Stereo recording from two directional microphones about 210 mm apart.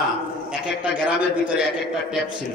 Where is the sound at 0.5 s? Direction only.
5° right (ahead or behind).